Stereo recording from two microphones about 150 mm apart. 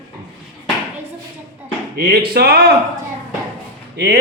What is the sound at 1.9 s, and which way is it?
Speech, 90° right.